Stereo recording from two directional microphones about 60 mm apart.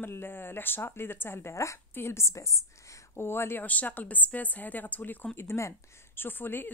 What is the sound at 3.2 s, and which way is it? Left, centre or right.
Speech, left.